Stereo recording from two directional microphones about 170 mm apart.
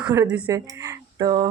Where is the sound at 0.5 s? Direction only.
20° right (ahead or behind).